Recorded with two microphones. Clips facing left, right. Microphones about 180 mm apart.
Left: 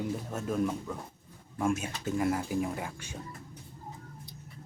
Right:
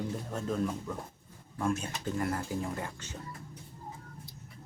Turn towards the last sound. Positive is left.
turn(degrees=10)  # may be behind; listen again after turning